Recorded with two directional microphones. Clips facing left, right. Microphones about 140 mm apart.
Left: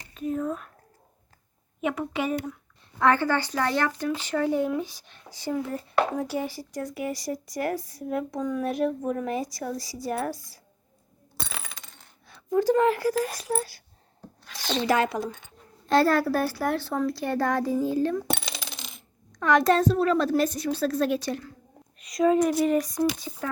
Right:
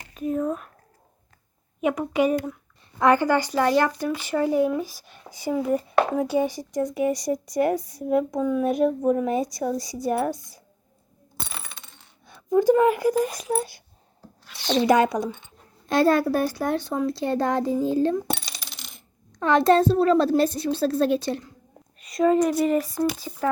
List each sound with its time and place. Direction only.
0.3 s a sound: 15° right (ahead or behind)
1.8 s speech: 15° right (ahead or behind)
8.4 s speech: 10° right (ahead or behind)
8.6 s speech: 20° right (ahead or behind)
12.3 s speech: 15° right (ahead or behind)
15.9 s speech: 15° right (ahead or behind)
19.4 s speech: 30° right (ahead or behind)
22.0 s speech: centre (ahead or behind)